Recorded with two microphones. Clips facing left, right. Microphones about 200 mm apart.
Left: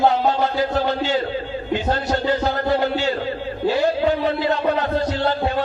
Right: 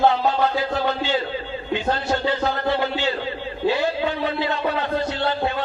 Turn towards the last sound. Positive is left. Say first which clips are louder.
# left 4 dB
turn(degrees=40)  # may be behind; listen again after turning